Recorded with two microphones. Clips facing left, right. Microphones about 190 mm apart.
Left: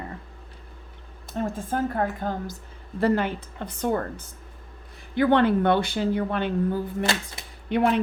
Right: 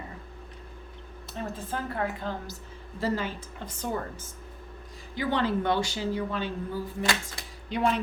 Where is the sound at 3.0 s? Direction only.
60° left (ahead or behind).